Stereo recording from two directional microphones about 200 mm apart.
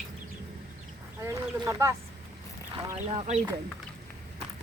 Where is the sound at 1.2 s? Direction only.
15° right (ahead or behind).